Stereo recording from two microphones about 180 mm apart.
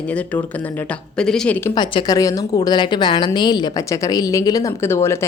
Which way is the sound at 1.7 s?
25° left (ahead or behind).